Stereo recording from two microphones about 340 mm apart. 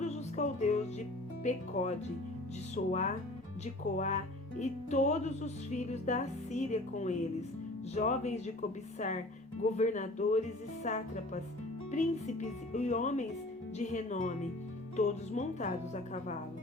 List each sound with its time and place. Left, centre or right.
0.0 s music: left